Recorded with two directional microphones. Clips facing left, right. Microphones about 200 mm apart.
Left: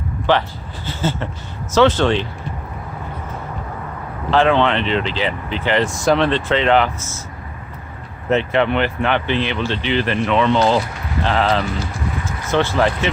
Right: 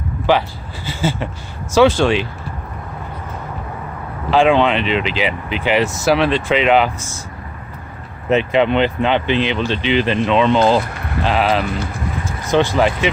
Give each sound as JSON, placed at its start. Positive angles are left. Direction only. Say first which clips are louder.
{"t": 0.3, "sound": "speech", "louder": "right 1 dB", "side_deg": -10}
{"t": 4.3, "sound": "speech", "louder": "right 2 dB", "side_deg": -15}
{"t": 8.3, "sound": "speech", "louder": "right 2 dB", "side_deg": -15}